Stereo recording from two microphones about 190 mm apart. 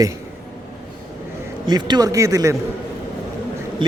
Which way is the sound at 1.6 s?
20° right (ahead or behind).